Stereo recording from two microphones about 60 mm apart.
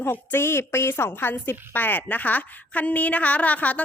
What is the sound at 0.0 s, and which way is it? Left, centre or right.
A woman's voice, left.